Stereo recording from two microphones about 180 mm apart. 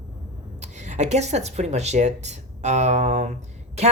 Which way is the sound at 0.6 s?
40° right (ahead or behind).